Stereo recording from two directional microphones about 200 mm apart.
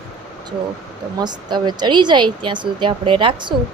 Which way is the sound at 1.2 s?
20° right (ahead or behind).